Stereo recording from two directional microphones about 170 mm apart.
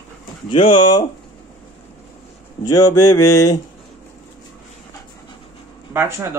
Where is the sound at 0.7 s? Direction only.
25° left (ahead or behind).